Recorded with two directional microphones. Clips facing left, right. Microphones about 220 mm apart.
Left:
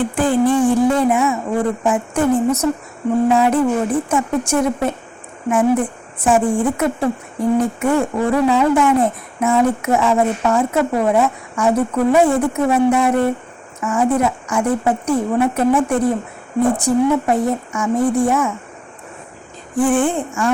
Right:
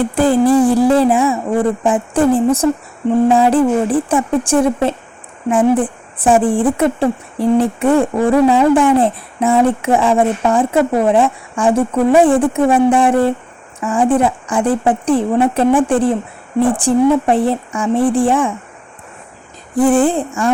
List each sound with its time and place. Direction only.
0.0 s speech: 35° right (ahead or behind)
19.7 s speech: 35° right (ahead or behind)